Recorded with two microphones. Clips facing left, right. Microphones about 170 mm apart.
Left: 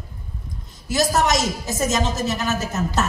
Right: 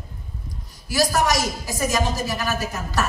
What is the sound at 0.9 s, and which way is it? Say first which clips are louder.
Speech: left 1 dB; 25° left (ahead or behind).